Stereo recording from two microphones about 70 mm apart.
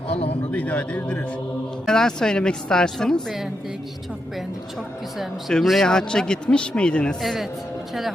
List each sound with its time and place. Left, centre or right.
0.5 s speech: left
1.9 s a man's voice: centre
5.5 s a man's voice: centre
7.2 s a man's voice: centre